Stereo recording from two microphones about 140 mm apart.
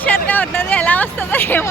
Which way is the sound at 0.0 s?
10° left (ahead or behind).